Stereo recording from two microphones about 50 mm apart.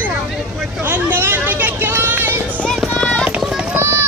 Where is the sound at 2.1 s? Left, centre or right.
Right.